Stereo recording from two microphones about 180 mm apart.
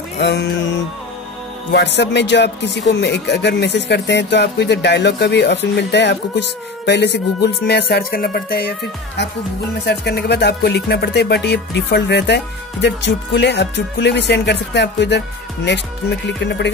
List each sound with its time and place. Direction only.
0.2 s music: 70° left (ahead or behind)
1.7 s music: 75° left (ahead or behind)
6.9 s speech: 70° left (ahead or behind)
9.8 s music: 65° left (ahead or behind)